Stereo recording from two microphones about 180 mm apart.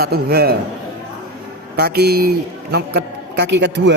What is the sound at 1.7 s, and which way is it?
A man's voice, 65° right (ahead or behind).